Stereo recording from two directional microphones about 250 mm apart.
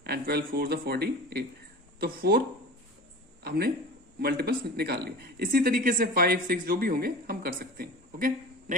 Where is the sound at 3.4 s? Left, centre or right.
Right.